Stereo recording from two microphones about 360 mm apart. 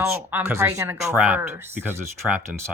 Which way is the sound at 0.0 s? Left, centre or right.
Centre.